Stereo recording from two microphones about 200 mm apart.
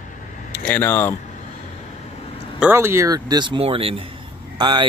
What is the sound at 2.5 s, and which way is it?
Speech, 10° right (ahead or behind).